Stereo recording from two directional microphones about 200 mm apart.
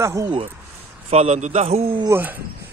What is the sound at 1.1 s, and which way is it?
A man's voice, 35° right (ahead or behind).